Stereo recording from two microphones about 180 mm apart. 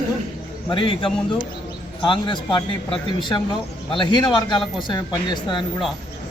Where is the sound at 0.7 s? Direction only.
30° left (ahead or behind).